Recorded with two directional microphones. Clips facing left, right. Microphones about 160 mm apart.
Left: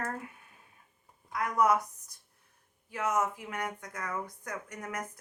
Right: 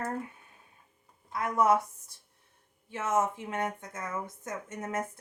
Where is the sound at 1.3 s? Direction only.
25° right (ahead or behind).